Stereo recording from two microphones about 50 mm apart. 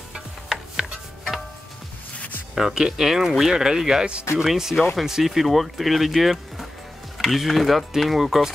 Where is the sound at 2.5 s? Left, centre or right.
Centre.